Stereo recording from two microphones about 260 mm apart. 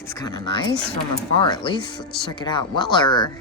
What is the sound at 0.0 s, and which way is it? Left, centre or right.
Speech, centre.